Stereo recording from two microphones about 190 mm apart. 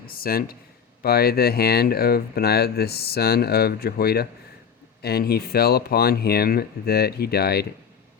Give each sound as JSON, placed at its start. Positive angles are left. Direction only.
{"t": 0.0, "sound": "speech", "side_deg": 50}